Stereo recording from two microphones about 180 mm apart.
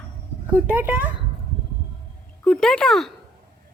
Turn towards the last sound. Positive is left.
turn(degrees=0)  # may be behind; listen again after turning